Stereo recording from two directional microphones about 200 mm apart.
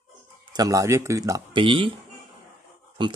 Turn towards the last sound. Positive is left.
turn(degrees=-25)  # may be behind; listen again after turning